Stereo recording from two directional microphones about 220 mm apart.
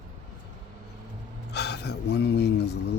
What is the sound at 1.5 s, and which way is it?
Speech, 50° left (ahead or behind).